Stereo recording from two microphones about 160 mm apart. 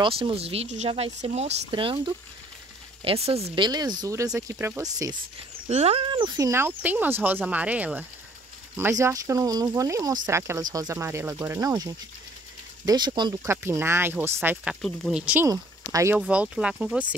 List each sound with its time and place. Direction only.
0.0 s speech: 35° right (ahead or behind)
5.7 s speech: 40° right (ahead or behind)
13.5 s speech: 15° right (ahead or behind)
15.4 s speech: 20° right (ahead or behind)
16.2 s speech: 5° right (ahead or behind)